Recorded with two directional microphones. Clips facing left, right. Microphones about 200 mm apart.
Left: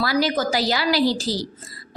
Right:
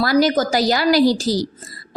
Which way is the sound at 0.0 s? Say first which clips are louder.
Right 5 dB; 45° right (ahead or behind).